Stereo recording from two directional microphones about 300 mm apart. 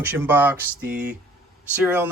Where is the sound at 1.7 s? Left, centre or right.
Centre.